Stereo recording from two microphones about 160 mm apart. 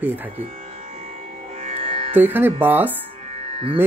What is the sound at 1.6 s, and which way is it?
Music, 35° right (ahead or behind).